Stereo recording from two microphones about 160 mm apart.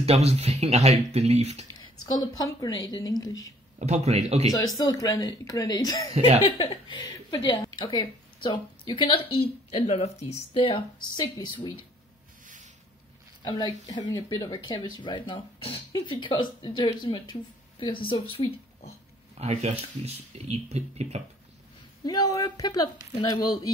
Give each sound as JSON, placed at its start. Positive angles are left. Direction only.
{"t": 0.0, "sound": "speech", "side_deg": -40}
{"t": 1.8, "sound": "speech", "side_deg": 20}
{"t": 3.8, "sound": "a man's voice", "side_deg": -45}
{"t": 4.5, "sound": "speech", "side_deg": 20}
{"t": 6.1, "sound": "speech", "side_deg": -40}
{"t": 6.4, "sound": "a woman's voice", "side_deg": 30}
{"t": 13.4, "sound": "speech", "side_deg": 30}
{"t": 19.3, "sound": "speech", "side_deg": -40}
{"t": 22.0, "sound": "speech", "side_deg": 25}